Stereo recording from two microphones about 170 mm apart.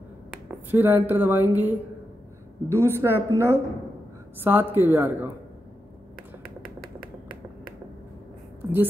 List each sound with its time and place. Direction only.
0.7 s speech: 10° right (ahead or behind)